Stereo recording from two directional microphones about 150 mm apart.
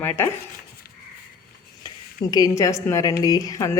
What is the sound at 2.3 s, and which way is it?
A woman's voice, 20° left (ahead or behind).